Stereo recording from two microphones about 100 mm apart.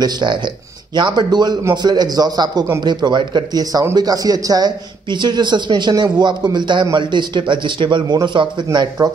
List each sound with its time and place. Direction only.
0.0 s a man's voice: 50° right (ahead or behind)
9.0 s speech: 40° right (ahead or behind)